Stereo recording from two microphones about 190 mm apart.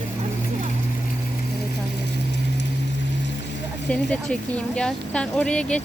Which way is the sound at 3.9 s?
5° left (ahead or behind).